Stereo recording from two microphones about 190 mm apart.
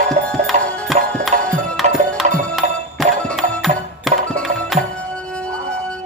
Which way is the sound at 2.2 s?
35° right (ahead or behind).